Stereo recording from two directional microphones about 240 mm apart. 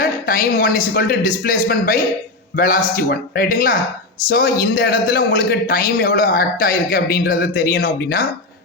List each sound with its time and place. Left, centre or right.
0.0 s a man's voice: left